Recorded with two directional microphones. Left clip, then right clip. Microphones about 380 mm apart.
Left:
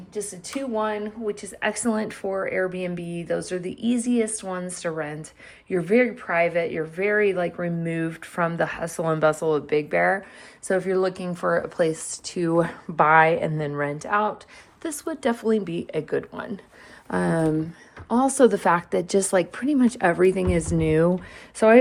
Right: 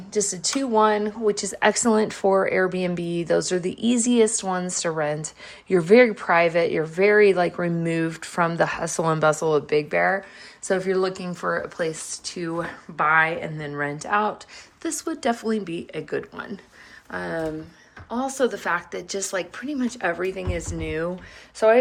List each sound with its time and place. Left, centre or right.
0.1 s a woman's voice: centre
17.1 s a woman's voice: centre